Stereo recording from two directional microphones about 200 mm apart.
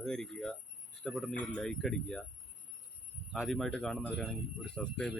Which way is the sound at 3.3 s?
Centre (ahead or behind).